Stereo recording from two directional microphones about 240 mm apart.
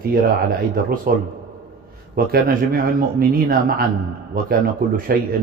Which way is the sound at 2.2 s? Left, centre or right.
Right.